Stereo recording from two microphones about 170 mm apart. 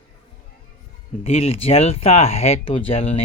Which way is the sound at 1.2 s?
35° left (ahead or behind).